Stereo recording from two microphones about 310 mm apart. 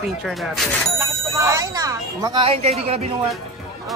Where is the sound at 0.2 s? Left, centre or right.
Centre.